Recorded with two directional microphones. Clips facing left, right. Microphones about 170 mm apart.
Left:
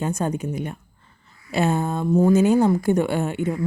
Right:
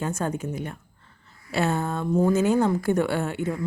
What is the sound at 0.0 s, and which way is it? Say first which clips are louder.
A woman's voice: left 3 dB; 15° left (ahead or behind).